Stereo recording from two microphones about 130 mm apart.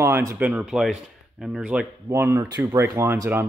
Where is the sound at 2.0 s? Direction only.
20° right (ahead or behind).